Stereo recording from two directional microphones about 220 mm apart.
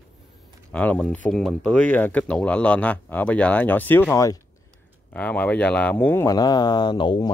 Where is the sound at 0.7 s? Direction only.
5° left (ahead or behind).